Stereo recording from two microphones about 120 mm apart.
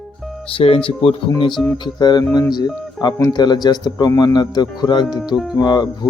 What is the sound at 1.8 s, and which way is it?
A man's voice, 35° left (ahead or behind).